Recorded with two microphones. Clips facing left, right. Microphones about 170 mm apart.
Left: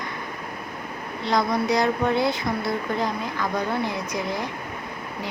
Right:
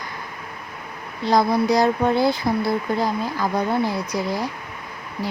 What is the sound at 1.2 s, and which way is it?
A woman's voice, 35° right (ahead or behind).